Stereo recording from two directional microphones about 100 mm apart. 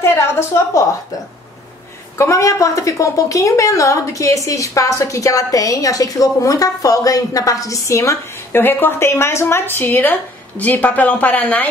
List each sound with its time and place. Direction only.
0.0 s a woman's voice: 25° left (ahead or behind)
2.1 s a woman's voice: 30° left (ahead or behind); by 11.7 s 15° left (ahead or behind)